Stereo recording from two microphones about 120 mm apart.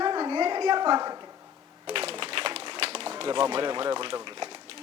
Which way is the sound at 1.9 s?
50° right (ahead or behind).